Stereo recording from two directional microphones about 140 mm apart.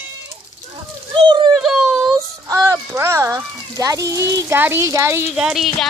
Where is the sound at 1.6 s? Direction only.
5° right (ahead or behind).